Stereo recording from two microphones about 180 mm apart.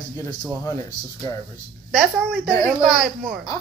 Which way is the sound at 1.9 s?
5° right (ahead or behind).